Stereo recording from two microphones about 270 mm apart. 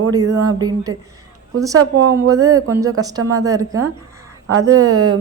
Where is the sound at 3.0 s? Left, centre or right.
Right.